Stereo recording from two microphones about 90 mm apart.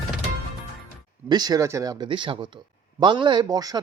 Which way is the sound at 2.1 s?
65° right (ahead or behind).